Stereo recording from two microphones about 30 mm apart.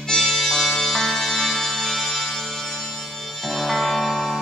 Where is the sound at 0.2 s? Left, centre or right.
Centre.